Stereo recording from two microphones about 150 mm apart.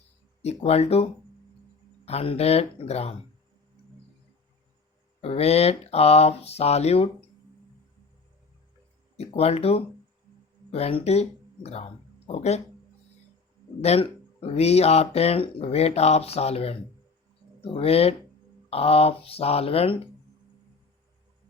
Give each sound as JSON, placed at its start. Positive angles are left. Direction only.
{"t": 0.4, "sound": "speech", "side_deg": 45}
{"t": 5.2, "sound": "speech", "side_deg": 40}
{"t": 9.1, "sound": "speech", "side_deg": 45}
{"t": 13.8, "sound": "speech", "side_deg": 45}